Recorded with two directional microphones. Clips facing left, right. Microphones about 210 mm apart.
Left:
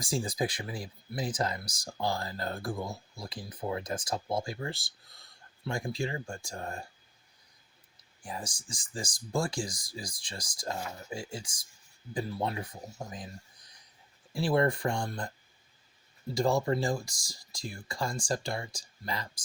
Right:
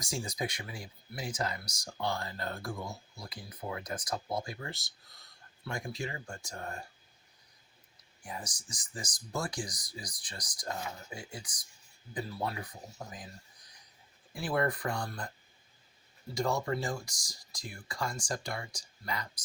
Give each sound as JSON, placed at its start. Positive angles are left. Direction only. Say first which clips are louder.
{"t": 0.0, "sound": "speech", "louder": "left 5 dB", "side_deg": 30}
{"t": 8.2, "sound": "speech", "louder": "left 3 dB", "side_deg": 30}
{"t": 14.3, "sound": "speech", "louder": "left 5 dB", "side_deg": 30}
{"t": 16.3, "sound": "speech", "louder": "left 4 dB", "side_deg": 30}